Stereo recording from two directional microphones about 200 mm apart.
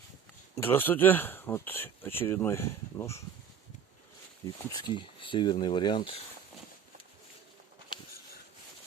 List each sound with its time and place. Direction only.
0.5 s speech: 10° left (ahead or behind)
4.4 s speech: 20° left (ahead or behind)